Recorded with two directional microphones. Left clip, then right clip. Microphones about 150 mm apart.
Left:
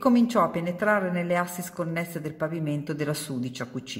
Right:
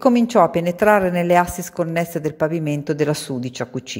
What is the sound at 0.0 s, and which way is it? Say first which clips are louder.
Speech: right 8 dB; 45° right (ahead or behind).